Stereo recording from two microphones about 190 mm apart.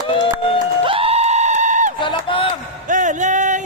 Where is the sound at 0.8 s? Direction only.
30° right (ahead or behind).